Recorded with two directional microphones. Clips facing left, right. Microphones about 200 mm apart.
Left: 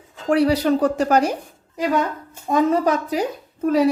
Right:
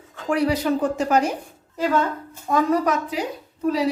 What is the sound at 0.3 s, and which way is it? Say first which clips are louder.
Speech: left 4 dB; 35° left (ahead or behind).